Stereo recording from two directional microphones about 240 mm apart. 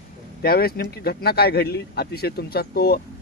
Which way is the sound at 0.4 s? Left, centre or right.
Left.